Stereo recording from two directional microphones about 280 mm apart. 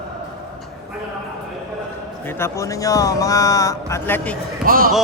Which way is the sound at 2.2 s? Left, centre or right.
Centre.